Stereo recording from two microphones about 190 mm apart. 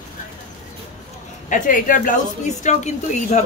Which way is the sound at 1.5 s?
45° left (ahead or behind).